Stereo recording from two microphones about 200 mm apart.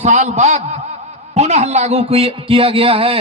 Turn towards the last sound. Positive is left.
turn(degrees=-25)  # may be behind; listen again after turning